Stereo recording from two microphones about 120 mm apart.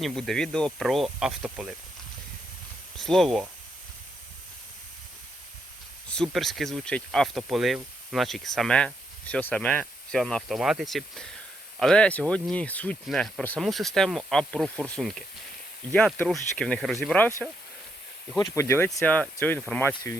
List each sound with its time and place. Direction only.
0.0 s speech: centre (ahead or behind)
3.0 s speech: 5° left (ahead or behind)
6.1 s speech: 5° left (ahead or behind)
13.1 s speech: centre (ahead or behind)
18.3 s speech: 25° left (ahead or behind)
19.4 s speech: 15° left (ahead or behind)